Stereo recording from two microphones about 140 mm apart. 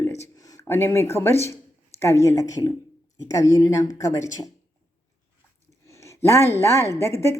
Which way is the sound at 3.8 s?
20° left (ahead or behind).